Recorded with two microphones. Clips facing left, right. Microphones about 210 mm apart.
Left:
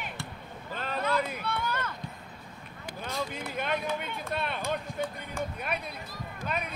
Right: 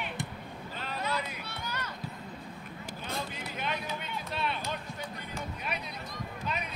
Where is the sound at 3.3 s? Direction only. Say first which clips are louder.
Left 4 dB; 50° left (ahead or behind).